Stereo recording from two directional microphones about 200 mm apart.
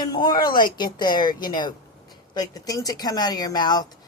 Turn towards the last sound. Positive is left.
turn(degrees=20)  # may be behind; listen again after turning